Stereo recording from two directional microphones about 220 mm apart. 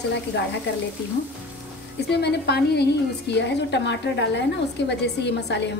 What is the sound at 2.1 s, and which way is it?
A woman's voice, 50° left (ahead or behind).